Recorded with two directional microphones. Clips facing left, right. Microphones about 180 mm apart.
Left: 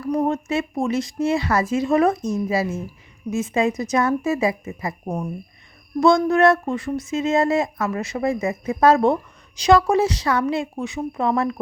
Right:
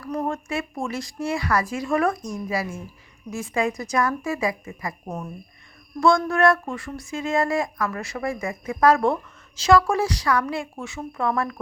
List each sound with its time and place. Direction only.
0.0 s speech: 15° left (ahead or behind)
5.0 s speech: 10° left (ahead or behind)